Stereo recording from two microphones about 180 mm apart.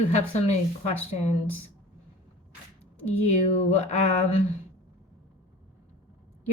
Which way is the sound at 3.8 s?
40° left (ahead or behind).